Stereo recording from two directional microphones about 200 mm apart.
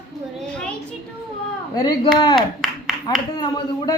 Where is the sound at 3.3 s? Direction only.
20° left (ahead or behind).